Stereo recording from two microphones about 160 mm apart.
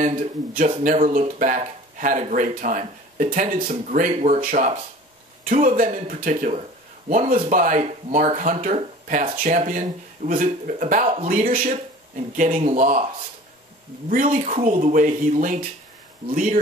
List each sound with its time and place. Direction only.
1.0 s speech: 55° right (ahead or behind)
6.3 s speech: 45° right (ahead or behind)
7.1 s speech: 60° right (ahead or behind)
14.1 s speech: 60° right (ahead or behind)